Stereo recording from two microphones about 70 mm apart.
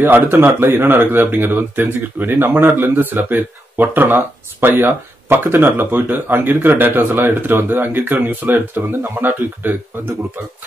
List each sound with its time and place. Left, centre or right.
0.0 s speech: right